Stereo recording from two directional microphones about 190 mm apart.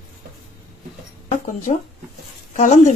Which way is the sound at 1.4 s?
40° left (ahead or behind).